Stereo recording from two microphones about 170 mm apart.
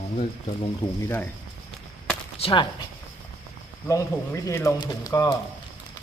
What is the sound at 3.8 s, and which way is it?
Speech, 20° left (ahead or behind).